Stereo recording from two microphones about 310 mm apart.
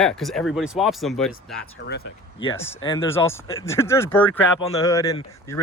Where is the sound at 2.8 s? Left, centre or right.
Centre.